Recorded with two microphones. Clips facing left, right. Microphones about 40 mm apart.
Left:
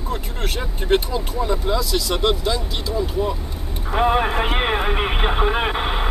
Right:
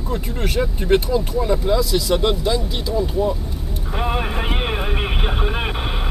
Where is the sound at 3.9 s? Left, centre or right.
Centre.